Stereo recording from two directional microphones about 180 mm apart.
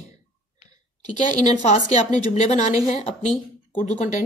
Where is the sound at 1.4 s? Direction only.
40° left (ahead or behind).